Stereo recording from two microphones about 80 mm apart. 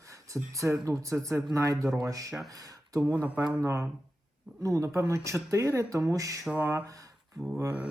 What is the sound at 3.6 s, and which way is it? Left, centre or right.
Speech, right.